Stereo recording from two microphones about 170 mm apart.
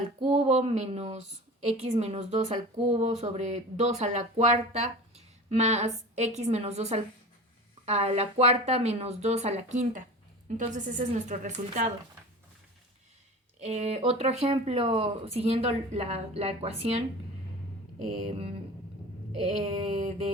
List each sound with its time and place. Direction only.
0.2 s a woman's voice: 35° right (ahead or behind)
13.6 s a woman's voice: 40° right (ahead or behind)
19.4 s a woman's voice: 35° right (ahead or behind)